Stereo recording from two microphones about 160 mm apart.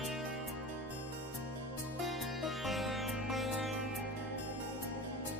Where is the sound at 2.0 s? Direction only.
Centre (ahead or behind).